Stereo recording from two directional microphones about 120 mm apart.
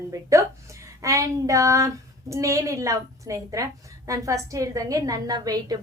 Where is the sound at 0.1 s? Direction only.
25° right (ahead or behind).